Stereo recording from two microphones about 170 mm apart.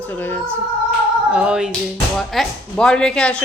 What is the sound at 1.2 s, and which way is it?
Speech, 5° right (ahead or behind).